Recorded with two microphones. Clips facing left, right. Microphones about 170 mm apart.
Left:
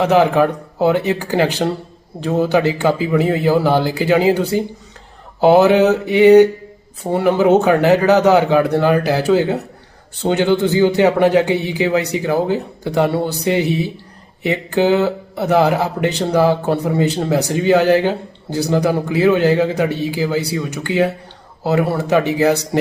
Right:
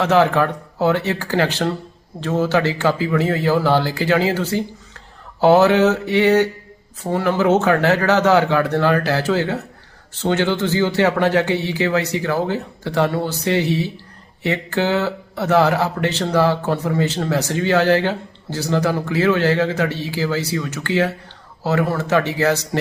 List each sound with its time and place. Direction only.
0.0 s a man's voice: 15° left (ahead or behind)